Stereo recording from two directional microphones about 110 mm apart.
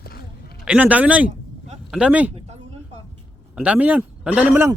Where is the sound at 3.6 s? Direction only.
15° right (ahead or behind).